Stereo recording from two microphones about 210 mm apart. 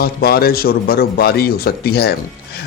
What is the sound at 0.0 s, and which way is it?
Speech, 45° left (ahead or behind).